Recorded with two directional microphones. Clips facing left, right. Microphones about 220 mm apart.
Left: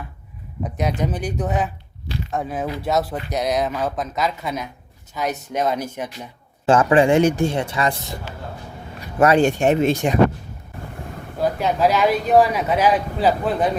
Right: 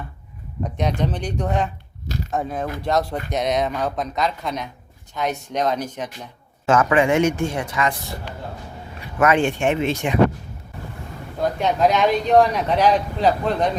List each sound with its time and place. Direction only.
0.6 s speech: 5° left (ahead or behind)
6.7 s speech: 30° left (ahead or behind)
9.1 s speech: 35° left (ahead or behind)
11.3 s speech: 5° left (ahead or behind)